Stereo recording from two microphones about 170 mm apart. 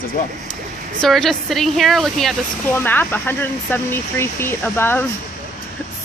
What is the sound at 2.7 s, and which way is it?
Speech, 10° left (ahead or behind).